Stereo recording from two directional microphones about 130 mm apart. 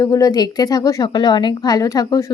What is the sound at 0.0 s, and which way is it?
A woman's voice, 25° left (ahead or behind).